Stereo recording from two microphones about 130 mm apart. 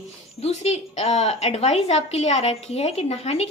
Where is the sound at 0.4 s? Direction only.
55° left (ahead or behind).